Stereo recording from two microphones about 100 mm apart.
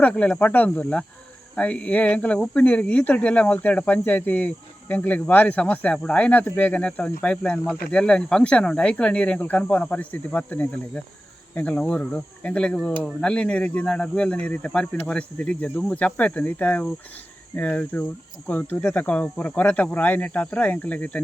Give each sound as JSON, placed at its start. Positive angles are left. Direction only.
{"t": 0.0, "sound": "speech", "side_deg": 15}